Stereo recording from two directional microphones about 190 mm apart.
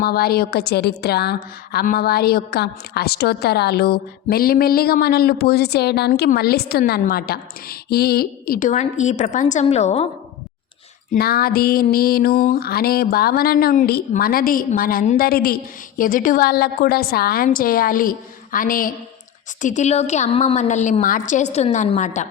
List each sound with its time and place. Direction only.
0.0 s a woman's voice: 55° left (ahead or behind); by 10.1 s 35° left (ahead or behind)
11.1 s music: 50° left (ahead or behind)
19.6 s a woman's voice: 40° left (ahead or behind)